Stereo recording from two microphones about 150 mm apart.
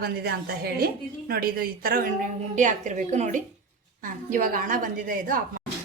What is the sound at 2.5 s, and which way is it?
A woman's voice, 55° right (ahead or behind).